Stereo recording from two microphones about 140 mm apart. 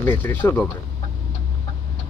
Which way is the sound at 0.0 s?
15° left (ahead or behind).